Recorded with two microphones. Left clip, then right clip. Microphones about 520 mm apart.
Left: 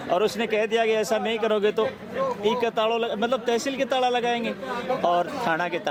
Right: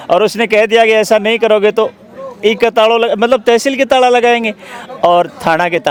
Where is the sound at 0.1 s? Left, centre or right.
Right.